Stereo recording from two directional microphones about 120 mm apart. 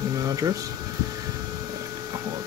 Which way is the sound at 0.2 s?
25° right (ahead or behind).